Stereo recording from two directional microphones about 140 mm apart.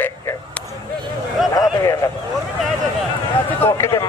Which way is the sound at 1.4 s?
Centre (ahead or behind).